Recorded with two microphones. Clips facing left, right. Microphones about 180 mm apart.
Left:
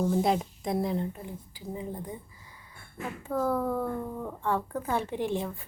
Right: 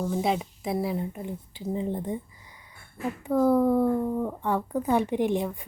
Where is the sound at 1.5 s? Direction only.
25° right (ahead or behind).